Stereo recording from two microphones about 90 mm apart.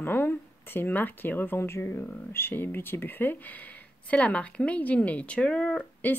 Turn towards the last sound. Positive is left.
turn(degrees=15)  # may be behind; listen again after turning